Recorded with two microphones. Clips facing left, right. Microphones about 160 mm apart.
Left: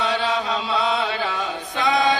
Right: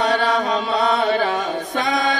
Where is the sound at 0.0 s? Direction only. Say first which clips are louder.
Right 4 dB; 50° right (ahead or behind).